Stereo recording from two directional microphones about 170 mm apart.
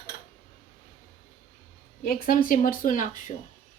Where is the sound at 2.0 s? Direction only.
60° left (ahead or behind).